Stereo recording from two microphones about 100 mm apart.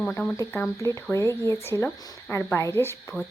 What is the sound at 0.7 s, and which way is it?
Speech, 30° left (ahead or behind).